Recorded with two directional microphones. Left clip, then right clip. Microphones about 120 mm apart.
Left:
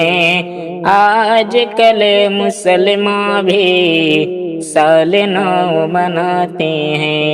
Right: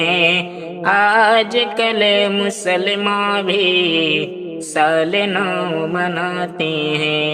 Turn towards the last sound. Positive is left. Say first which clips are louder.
# left 3 dB
turn(degrees=30)  # may be behind; listen again after turning